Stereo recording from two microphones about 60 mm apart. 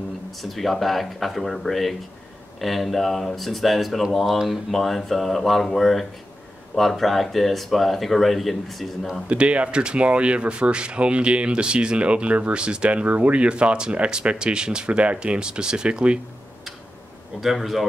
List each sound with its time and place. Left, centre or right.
0.4 s speech: centre
9.3 s speech: right
17.4 s speech: centre